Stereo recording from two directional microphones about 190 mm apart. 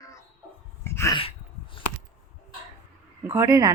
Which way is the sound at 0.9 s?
15° left (ahead or behind).